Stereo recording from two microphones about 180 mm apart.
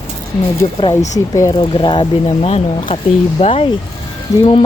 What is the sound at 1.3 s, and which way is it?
Speech, 20° left (ahead or behind).